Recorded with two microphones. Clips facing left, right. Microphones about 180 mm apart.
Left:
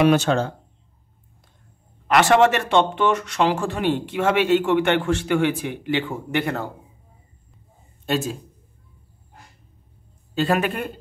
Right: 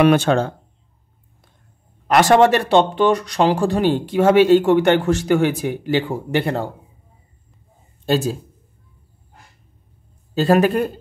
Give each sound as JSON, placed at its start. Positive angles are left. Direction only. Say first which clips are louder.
{"t": 0.0, "sound": "speech", "louder": "right 3 dB", "side_deg": -55}
{"t": 2.0, "sound": "speech", "louder": "right 3 dB", "side_deg": -40}
{"t": 8.0, "sound": "a man's voice", "louder": "right 5 dB", "side_deg": -35}
{"t": 10.3, "sound": "speech", "louder": "right 6 dB", "side_deg": -40}